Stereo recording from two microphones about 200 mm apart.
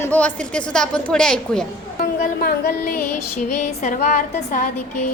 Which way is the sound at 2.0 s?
45° left (ahead or behind).